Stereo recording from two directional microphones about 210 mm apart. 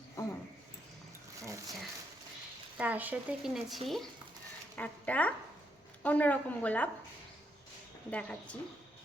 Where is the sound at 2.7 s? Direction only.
5° right (ahead or behind).